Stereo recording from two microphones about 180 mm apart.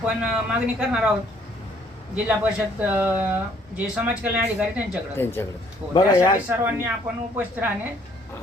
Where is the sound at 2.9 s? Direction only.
10° right (ahead or behind).